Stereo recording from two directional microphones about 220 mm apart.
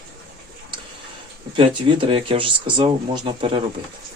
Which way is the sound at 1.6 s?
25° right (ahead or behind).